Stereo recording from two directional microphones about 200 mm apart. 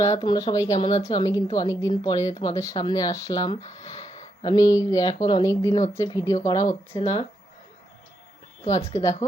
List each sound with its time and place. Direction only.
0.0 s a woman's voice: 15° left (ahead or behind)
8.6 s speech: 15° left (ahead or behind)